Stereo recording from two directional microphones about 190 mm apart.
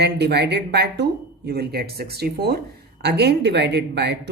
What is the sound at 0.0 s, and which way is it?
Speech, 60° right (ahead or behind).